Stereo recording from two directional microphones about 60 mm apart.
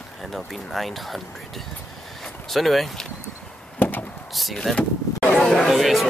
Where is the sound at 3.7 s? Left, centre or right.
Left.